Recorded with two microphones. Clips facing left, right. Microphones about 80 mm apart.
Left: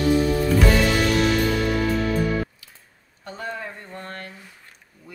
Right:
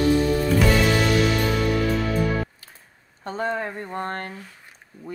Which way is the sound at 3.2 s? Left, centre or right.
Right.